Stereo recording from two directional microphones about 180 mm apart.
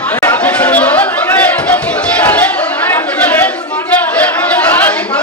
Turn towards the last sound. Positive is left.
turn(degrees=10)  # may be behind; listen again after turning